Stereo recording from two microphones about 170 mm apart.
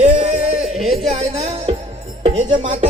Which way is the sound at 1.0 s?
35° right (ahead or behind).